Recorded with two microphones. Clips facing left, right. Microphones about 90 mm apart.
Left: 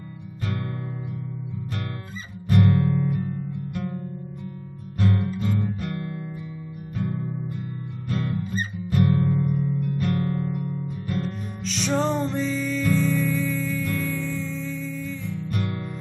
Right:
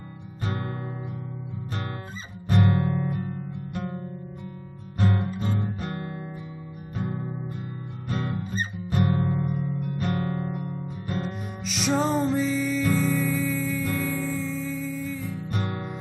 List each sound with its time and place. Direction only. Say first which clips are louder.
0.5 s music: even; 30° right (ahead or behind)
2.4 s music: left 3 dB; 30° right (ahead or behind)
4.9 s guitar: left 2 dB; 30° right (ahead or behind)
7.0 s music: left 2 dB; 30° right (ahead or behind)
11.6 s music: even; 5° right (ahead or behind)
15.3 s music: left 1 dB; 30° right (ahead or behind)